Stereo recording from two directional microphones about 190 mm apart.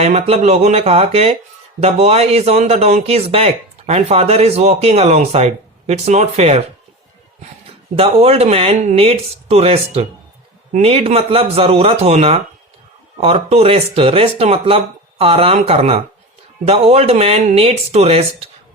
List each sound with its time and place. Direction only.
0.0 s speech: 35° right (ahead or behind)
7.9 s speech: 30° right (ahead or behind)